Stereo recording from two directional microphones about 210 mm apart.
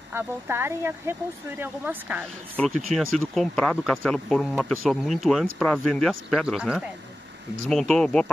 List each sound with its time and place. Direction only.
0.1 s speech: 10° right (ahead or behind)
2.5 s speech: 5° left (ahead or behind)